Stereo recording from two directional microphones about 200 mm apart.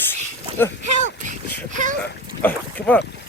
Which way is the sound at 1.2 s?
40° right (ahead or behind).